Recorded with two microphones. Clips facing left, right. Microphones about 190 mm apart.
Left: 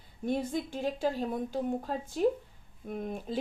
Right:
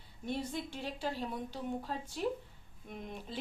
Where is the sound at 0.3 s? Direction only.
45° left (ahead or behind).